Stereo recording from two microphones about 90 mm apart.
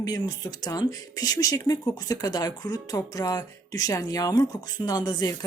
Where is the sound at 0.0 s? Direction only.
45° left (ahead or behind).